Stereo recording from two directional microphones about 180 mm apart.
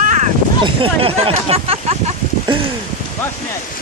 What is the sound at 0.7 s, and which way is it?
Speech, 30° right (ahead or behind).